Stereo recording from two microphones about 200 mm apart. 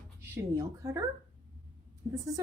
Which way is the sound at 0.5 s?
15° right (ahead or behind).